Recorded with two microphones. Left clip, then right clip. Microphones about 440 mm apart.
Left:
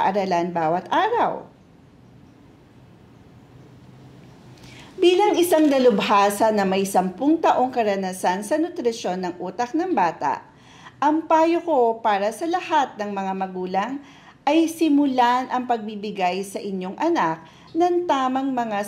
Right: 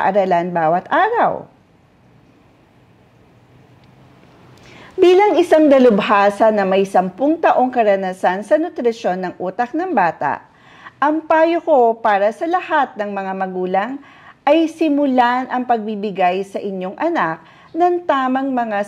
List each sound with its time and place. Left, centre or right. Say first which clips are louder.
0.0 s a woman's voice: right 6 dB; right
4.6 s a woman's voice: right 6 dB; right